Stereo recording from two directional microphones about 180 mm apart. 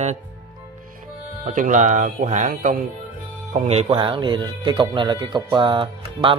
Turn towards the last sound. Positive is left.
turn(degrees=-25)  # may be behind; listen again after turning